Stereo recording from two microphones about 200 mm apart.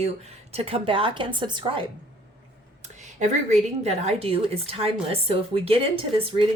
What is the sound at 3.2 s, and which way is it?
A woman's voice, 35° right (ahead or behind).